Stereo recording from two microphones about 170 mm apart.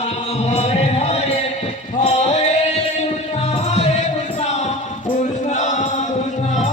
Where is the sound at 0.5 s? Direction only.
40° left (ahead or behind).